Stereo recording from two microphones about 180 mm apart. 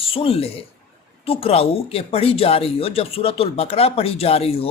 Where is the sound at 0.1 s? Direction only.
30° left (ahead or behind).